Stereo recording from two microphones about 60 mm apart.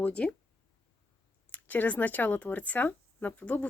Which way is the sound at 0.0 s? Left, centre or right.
Left.